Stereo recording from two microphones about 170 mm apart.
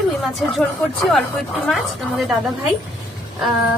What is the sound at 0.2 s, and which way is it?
A woman's voice, centre (ahead or behind).